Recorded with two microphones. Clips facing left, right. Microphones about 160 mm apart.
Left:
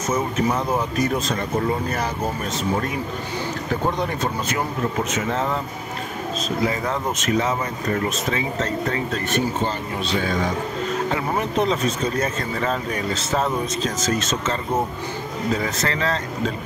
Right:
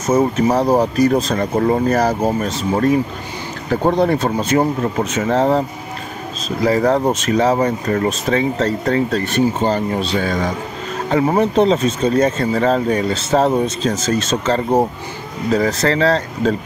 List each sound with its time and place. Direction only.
0.1 s speech: 35° right (ahead or behind)
3.8 s speech: 35° right (ahead or behind)
6.6 s speech: 40° right (ahead or behind)
11.1 s speech: 35° right (ahead or behind)